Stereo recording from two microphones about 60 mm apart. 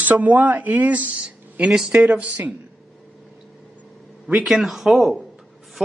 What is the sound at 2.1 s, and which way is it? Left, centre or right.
Speech, right.